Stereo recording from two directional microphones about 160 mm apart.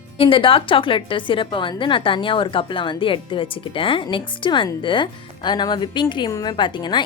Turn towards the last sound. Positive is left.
turn(degrees=30)  # may be behind; listen again after turning